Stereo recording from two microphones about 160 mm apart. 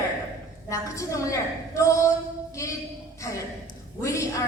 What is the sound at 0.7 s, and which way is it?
A woman's voice, 20° left (ahead or behind).